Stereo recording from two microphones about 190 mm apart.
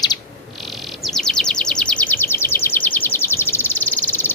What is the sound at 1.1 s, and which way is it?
Bird vocalization, 5° left (ahead or behind).